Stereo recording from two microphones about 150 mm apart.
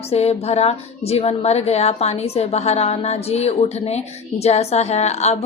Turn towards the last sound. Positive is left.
turn(degrees=45)  # may be behind; listen again after turning